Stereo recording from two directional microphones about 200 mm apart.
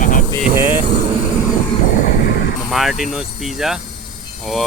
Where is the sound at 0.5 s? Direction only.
10° right (ahead or behind).